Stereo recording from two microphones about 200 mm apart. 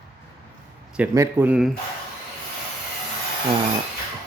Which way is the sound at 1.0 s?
10° right (ahead or behind).